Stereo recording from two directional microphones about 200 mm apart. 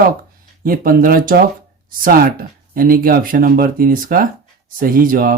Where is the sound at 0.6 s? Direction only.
45° right (ahead or behind).